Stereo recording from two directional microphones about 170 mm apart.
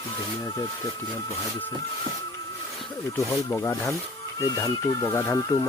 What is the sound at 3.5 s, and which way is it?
Speech, 20° left (ahead or behind).